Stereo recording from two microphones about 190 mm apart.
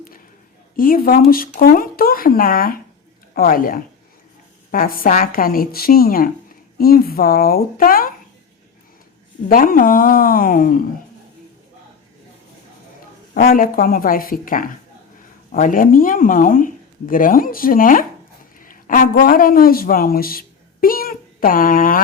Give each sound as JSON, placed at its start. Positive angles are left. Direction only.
{"t": 0.8, "sound": "speech", "side_deg": 50}
{"t": 9.5, "sound": "speech", "side_deg": 45}
{"t": 13.3, "sound": "speech", "side_deg": 45}